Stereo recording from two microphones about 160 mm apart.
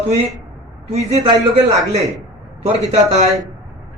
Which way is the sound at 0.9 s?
40° right (ahead or behind).